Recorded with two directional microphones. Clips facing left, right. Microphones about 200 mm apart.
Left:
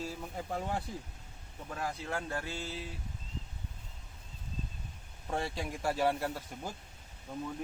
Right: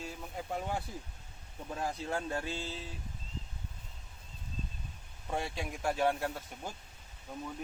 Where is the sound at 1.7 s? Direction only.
20° right (ahead or behind).